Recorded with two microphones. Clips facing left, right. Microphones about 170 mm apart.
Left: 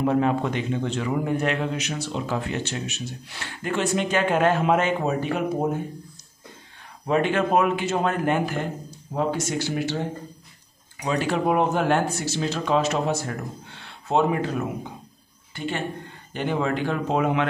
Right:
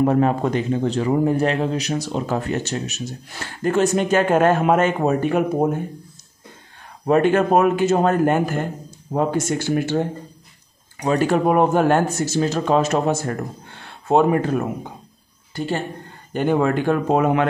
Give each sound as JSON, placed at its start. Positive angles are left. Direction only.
{"t": 0.0, "sound": "a man's voice", "side_deg": -45}
{"t": 7.1, "sound": "a man's voice", "side_deg": -45}
{"t": 15.5, "sound": "speech", "side_deg": -35}
{"t": 16.3, "sound": "a man's voice", "side_deg": -50}